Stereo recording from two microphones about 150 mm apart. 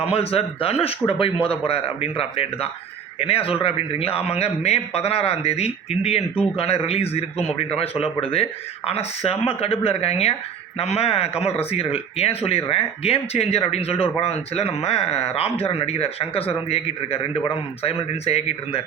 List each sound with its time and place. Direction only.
0.0 s speech: 40° left (ahead or behind)